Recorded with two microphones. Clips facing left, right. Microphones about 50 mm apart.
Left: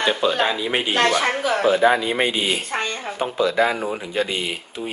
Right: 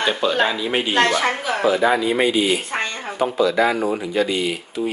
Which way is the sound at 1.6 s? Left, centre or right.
Left.